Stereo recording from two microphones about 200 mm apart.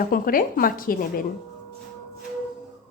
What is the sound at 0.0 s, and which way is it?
A woman's voice, 45° left (ahead or behind).